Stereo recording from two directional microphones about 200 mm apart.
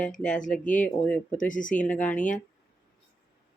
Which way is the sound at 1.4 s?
40° left (ahead or behind).